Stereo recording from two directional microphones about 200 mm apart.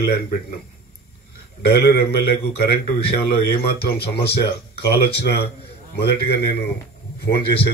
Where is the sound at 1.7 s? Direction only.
55° left (ahead or behind).